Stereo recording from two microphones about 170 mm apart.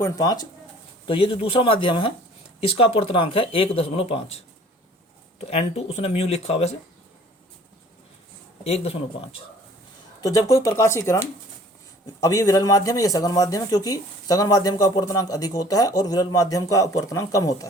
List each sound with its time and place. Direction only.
0.0 s speech: 20° left (ahead or behind); by 6.7 s 35° left (ahead or behind)
8.6 s speech: 35° left (ahead or behind)
10.2 s speech: 20° left (ahead or behind)
12.2 s speech: 20° left (ahead or behind)